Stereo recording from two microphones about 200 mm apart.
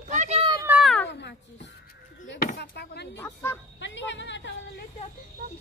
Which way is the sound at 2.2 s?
55° left (ahead or behind).